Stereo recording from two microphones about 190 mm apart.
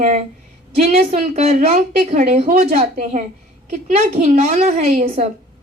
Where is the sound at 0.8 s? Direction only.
35° right (ahead or behind).